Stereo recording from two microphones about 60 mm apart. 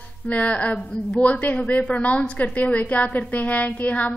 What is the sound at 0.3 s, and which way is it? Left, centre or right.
A woman's voice, left.